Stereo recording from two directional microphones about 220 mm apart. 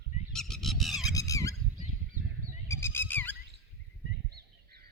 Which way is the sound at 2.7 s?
10° left (ahead or behind).